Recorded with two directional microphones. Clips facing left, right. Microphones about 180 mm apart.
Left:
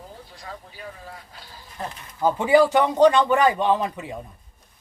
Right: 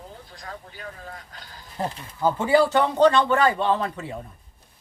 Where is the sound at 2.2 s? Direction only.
15° left (ahead or behind).